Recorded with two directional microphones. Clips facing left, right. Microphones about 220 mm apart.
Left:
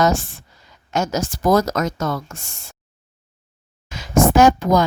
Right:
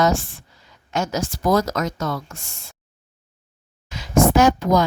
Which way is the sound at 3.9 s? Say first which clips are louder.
Left 1 dB; 45° left (ahead or behind).